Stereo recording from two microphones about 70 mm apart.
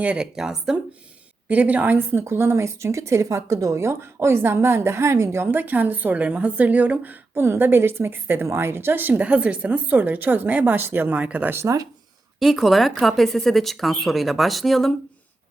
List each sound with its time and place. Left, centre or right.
0.0 s a woman's voice: centre
0.3 s speech: centre
1.5 s a woman's voice: right
5.5 s a woman's voice: right
11.5 s a woman's voice: right
12.4 s speech: centre